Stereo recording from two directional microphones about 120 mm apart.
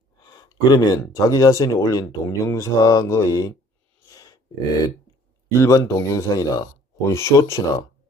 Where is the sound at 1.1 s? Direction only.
30° left (ahead or behind).